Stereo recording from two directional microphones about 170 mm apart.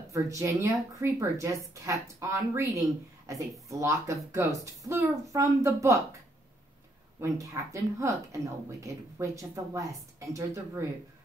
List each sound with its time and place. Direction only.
0.1 s a woman's voice: 20° right (ahead or behind)
7.2 s a woman's voice: 20° right (ahead or behind)